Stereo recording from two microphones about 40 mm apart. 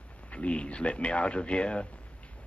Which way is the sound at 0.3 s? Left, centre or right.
Left.